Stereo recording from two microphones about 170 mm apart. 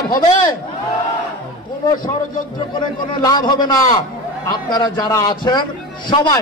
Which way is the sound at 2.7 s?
25° left (ahead or behind).